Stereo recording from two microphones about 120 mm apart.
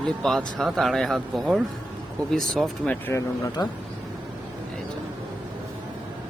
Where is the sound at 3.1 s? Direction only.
25° left (ahead or behind).